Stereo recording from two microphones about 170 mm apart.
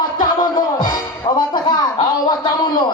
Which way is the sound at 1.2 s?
30° left (ahead or behind).